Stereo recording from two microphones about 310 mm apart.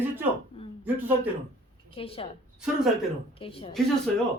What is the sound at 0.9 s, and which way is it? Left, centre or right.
Speech, centre.